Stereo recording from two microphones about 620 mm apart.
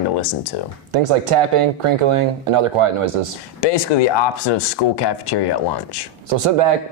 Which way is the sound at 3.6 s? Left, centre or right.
Left.